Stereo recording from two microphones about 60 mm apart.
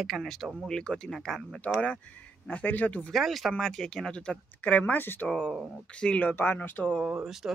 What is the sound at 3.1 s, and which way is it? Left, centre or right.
Speech, centre.